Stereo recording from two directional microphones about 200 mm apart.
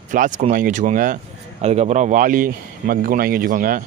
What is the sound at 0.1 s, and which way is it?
Speech, 40° right (ahead or behind).